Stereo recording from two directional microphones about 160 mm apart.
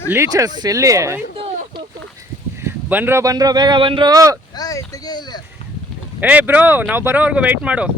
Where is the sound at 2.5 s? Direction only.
15° right (ahead or behind); by 4.1 s 30° right (ahead or behind).